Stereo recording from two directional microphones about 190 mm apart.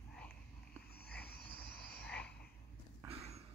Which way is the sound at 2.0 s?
5° left (ahead or behind).